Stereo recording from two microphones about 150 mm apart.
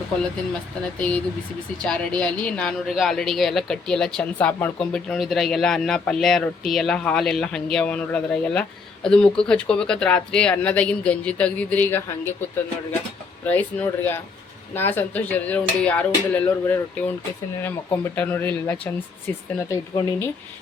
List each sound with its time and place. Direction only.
0.9 s speech: 10° left (ahead or behind)
13.4 s speech: 10° left (ahead or behind)
19.7 s speech: 25° left (ahead or behind)